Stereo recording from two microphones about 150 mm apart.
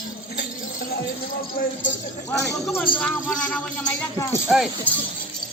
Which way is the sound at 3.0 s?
5° left (ahead or behind).